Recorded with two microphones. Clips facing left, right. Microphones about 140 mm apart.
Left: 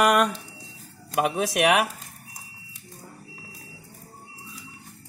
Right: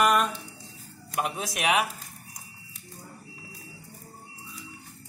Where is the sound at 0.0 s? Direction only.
70° left (ahead or behind).